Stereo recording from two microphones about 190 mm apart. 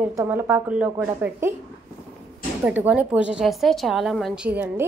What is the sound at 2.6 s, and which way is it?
A woman's voice, 5° right (ahead or behind).